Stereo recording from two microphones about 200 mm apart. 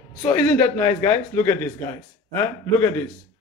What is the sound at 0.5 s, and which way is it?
A man's voice, 10° left (ahead or behind).